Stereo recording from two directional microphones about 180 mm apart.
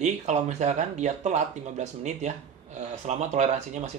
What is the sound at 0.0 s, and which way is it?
A man's voice, 40° right (ahead or behind).